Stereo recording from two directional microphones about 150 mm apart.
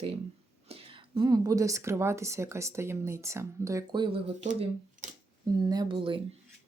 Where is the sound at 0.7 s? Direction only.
35° right (ahead or behind).